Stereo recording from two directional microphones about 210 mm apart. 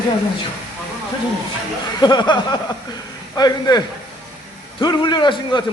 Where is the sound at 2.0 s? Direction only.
20° left (ahead or behind).